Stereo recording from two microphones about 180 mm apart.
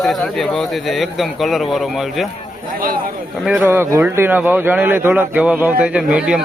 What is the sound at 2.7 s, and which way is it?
Speech, 50° right (ahead or behind).